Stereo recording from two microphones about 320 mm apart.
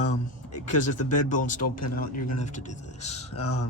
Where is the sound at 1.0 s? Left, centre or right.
Left.